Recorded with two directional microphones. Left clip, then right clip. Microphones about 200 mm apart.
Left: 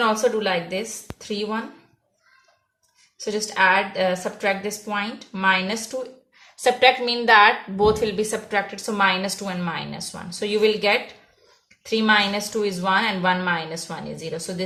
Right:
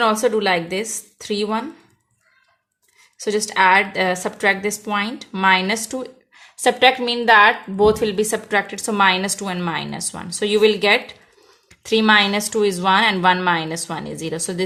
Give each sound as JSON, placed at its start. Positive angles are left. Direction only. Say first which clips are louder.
{"t": 0.0, "sound": "a woman's voice", "louder": "right 3 dB", "side_deg": -50}
{"t": 3.2, "sound": "a woman's voice", "louder": "right 4 dB", "side_deg": -50}